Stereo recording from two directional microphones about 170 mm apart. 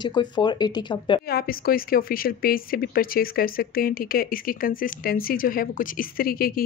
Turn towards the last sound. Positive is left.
turn(degrees=60)  # may be behind; listen again after turning